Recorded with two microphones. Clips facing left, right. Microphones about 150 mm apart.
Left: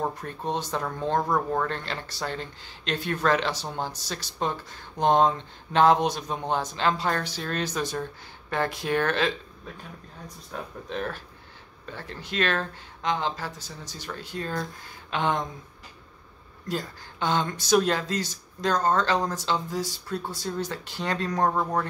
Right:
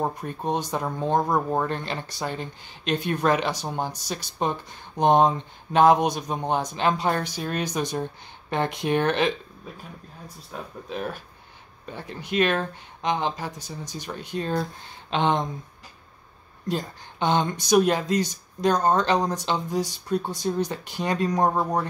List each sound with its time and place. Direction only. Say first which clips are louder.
0.0 s speech: right 2 dB; 15° right (ahead or behind)
10.5 s speech: even; 5° right (ahead or behind); by 15.4 s 25° right (ahead or behind)
16.6 s speech: right 3 dB; 20° right (ahead or behind)